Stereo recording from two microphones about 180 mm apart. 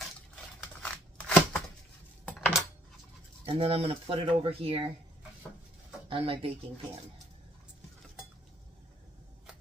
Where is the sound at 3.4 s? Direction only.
35° right (ahead or behind).